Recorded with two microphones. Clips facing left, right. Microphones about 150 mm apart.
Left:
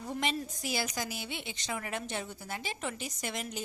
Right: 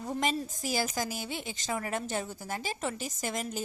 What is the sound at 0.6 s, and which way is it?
A woman's voice, 40° right (ahead or behind).